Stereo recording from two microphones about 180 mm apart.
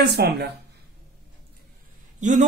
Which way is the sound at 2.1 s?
45° right (ahead or behind).